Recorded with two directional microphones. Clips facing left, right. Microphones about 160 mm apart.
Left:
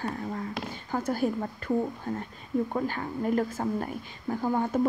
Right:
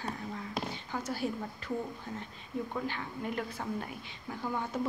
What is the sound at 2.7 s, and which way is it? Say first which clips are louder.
A woman's voice: left 6 dB; 45° left (ahead or behind).